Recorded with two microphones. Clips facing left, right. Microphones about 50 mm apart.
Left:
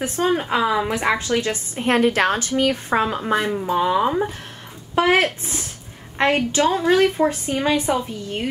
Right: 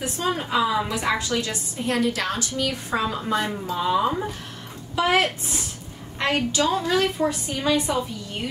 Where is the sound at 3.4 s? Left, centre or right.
Centre.